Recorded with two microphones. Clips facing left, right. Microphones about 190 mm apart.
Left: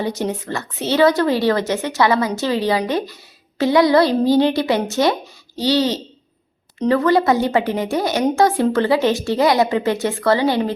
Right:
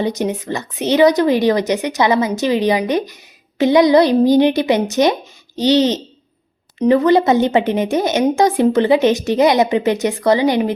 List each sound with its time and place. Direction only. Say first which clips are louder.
0.0 s a woman's voice: right 3 dB; 20° right (ahead or behind)